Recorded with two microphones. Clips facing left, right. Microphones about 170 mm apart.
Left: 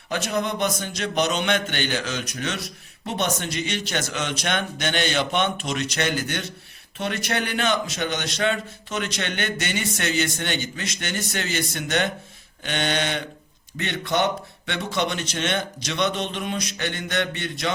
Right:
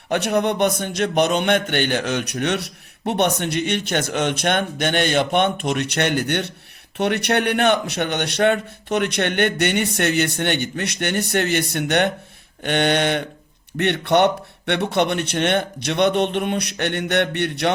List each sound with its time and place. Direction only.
0.1 s a man's voice: 60° right (ahead or behind)